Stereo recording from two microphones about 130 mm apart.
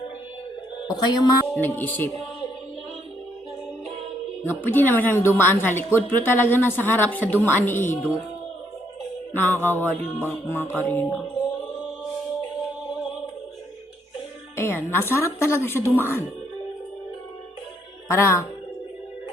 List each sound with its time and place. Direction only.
0.9 s speech: 35° left (ahead or behind)
1.5 s a woman's voice: 15° left (ahead or behind)
4.4 s a woman's voice: 15° left (ahead or behind)
9.3 s a woman's voice: 15° left (ahead or behind)
14.5 s a woman's voice: 15° left (ahead or behind)
18.1 s a woman's voice: 20° left (ahead or behind)